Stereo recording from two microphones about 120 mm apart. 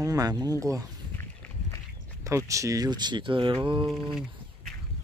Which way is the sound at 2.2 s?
25° right (ahead or behind).